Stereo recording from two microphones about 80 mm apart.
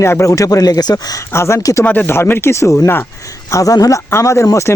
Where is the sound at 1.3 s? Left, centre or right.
Left.